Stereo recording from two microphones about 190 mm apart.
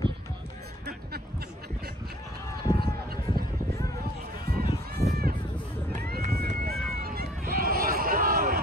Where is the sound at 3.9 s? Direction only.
55° right (ahead or behind).